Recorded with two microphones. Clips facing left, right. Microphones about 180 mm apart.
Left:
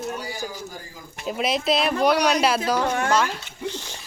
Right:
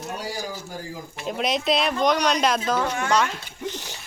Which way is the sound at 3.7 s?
15° right (ahead or behind).